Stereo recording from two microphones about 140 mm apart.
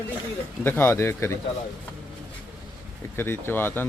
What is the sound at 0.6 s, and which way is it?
Speech, 15° left (ahead or behind).